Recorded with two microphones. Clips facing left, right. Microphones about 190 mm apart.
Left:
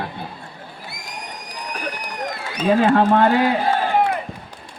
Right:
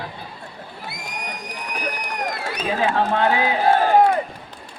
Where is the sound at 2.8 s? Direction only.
55° left (ahead or behind).